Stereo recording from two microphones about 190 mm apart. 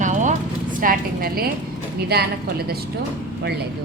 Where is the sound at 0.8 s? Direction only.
50° right (ahead or behind).